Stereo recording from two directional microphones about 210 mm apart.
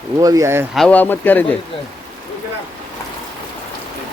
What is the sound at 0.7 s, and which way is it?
Speech, 5° left (ahead or behind).